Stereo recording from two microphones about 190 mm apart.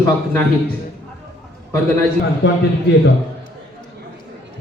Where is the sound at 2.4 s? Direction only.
70° left (ahead or behind).